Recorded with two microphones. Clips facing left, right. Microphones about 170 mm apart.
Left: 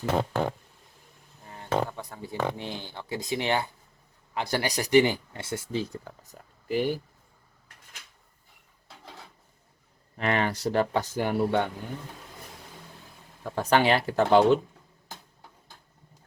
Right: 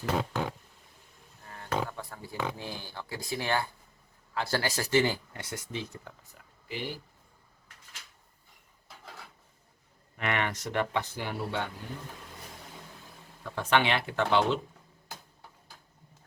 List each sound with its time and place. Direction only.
1.5 s speech: 20° left (ahead or behind); by 6.9 s 45° left (ahead or behind)
10.2 s speech: 35° left (ahead or behind)
13.4 s speech: 40° left (ahead or behind)